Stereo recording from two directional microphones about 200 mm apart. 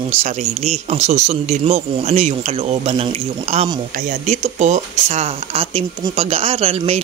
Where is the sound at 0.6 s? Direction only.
30° right (ahead or behind).